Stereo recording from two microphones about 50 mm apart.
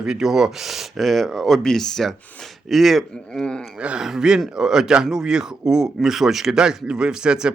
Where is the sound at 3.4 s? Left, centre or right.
Centre.